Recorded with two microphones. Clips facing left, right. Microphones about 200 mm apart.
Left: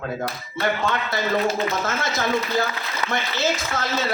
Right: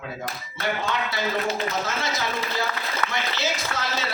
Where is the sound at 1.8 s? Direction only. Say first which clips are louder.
Left 3 dB; 50° left (ahead or behind).